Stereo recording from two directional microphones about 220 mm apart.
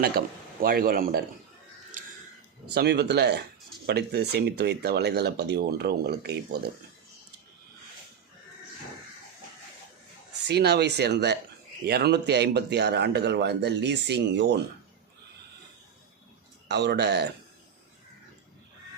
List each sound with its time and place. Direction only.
0.0 s speech: 45° right (ahead or behind)
1.9 s a sound: 35° right (ahead or behind)
2.7 s speech: 45° right (ahead or behind)
10.4 s speech: 50° right (ahead or behind)
16.6 s speech: 50° right (ahead or behind)